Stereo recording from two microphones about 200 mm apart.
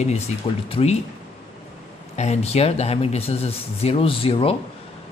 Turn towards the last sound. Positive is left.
turn(degrees=30)  # may be behind; listen again after turning